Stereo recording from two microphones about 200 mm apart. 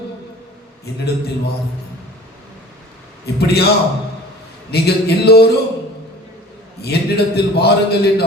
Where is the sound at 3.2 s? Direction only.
55° left (ahead or behind).